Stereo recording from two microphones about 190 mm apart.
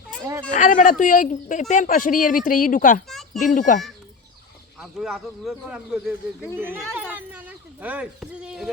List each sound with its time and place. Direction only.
0.5 s speech: 40° left (ahead or behind)
3.1 s a sound: centre (ahead or behind)
3.4 s speech: 45° left (ahead or behind)
4.8 s speech: centre (ahead or behind)